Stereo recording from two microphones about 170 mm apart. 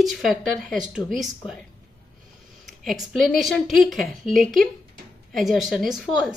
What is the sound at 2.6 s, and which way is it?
A woman's voice, centre (ahead or behind).